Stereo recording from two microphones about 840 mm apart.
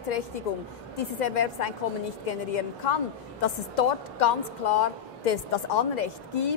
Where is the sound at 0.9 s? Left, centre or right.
Left.